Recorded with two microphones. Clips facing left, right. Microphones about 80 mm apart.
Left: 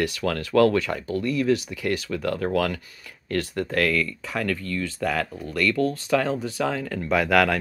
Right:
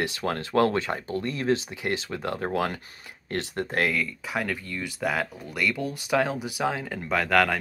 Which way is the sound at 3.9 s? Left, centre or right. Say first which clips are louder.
Left 2 dB; centre.